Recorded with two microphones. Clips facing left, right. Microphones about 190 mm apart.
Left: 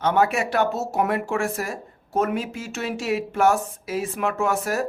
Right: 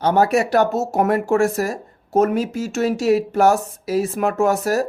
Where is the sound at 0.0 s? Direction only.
40° right (ahead or behind).